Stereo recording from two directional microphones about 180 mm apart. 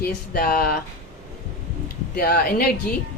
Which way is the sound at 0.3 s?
55° left (ahead or behind).